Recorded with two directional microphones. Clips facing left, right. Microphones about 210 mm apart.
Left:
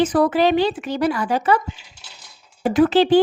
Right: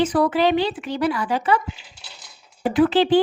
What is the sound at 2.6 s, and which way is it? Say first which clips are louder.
Speech: left 2 dB; 45° left (ahead or behind).